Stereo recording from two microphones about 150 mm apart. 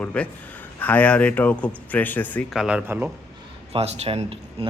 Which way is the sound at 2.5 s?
5° right (ahead or behind).